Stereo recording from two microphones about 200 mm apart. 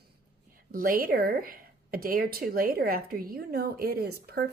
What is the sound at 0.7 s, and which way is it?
Speech, 45° right (ahead or behind).